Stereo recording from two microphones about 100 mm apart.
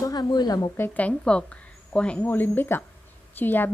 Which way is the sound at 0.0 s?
40° left (ahead or behind).